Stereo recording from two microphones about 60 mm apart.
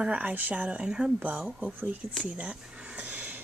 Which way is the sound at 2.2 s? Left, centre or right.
Centre.